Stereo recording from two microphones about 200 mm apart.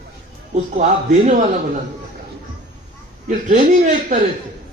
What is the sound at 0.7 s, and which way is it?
Speech, 40° right (ahead or behind).